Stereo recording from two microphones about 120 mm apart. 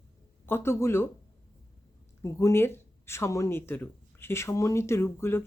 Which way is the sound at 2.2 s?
25° left (ahead or behind).